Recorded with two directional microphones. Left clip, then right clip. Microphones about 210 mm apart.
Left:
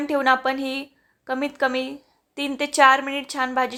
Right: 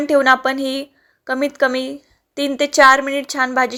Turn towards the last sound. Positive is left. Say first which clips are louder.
# right 6 dB
turn(degrees=-20)  # may be behind; listen again after turning